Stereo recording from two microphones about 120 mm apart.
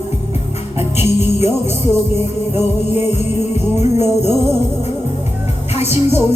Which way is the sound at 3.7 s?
65° left (ahead or behind).